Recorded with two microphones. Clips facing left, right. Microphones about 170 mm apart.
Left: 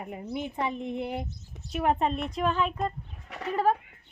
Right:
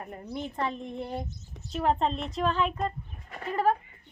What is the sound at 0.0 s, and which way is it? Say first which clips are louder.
A woman's voice: left 2 dB; 10° left (ahead or behind).